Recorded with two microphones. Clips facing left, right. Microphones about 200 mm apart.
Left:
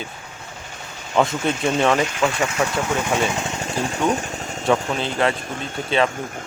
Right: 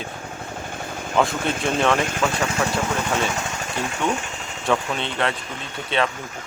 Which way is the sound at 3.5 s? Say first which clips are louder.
Left 3 dB; 30° left (ahead or behind).